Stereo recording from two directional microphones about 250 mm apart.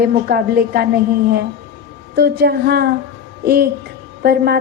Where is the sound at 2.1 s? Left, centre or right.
Right.